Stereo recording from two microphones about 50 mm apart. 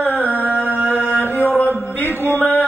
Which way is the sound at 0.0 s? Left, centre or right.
Left.